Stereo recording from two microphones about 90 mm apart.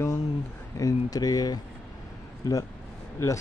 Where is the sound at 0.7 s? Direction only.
40° left (ahead or behind).